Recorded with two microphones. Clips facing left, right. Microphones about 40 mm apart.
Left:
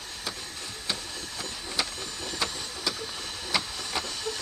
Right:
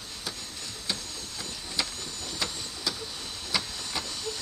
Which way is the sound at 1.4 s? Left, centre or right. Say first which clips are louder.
Left 1 dB; left.